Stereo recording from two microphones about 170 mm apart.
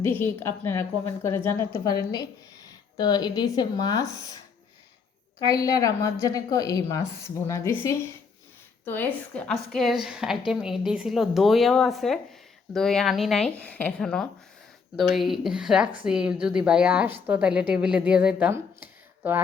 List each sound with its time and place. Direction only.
0.0 s a woman's voice: 15° left (ahead or behind)
5.5 s a woman's voice: 20° left (ahead or behind); by 19.4 s 10° right (ahead or behind)